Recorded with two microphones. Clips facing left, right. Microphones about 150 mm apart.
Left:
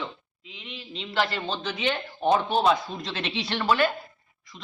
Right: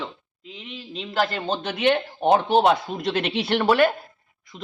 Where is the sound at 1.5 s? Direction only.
60° right (ahead or behind).